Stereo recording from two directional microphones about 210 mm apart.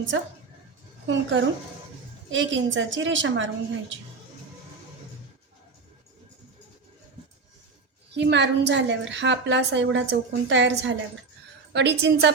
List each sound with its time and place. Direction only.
1.0 s a woman's voice: 60° right (ahead or behind)
8.1 s a woman's voice: 55° right (ahead or behind)